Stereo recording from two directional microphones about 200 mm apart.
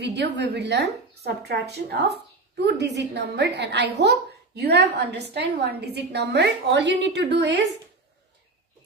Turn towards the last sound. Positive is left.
turn(degrees=-60)  # may be behind; listen again after turning